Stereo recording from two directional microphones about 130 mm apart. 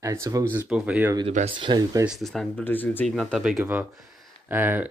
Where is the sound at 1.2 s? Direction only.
50° right (ahead or behind); by 2.1 s 35° right (ahead or behind).